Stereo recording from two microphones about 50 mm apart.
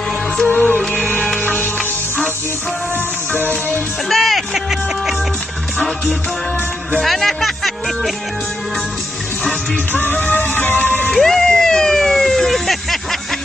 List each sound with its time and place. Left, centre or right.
0.5 s music: left
3.3 s music: left
4.1 s music: centre
7.0 s speech: centre
9.9 s music: left
11.1 s vehicle: centre